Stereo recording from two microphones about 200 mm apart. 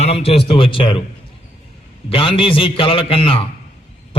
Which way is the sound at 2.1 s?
25° left (ahead or behind).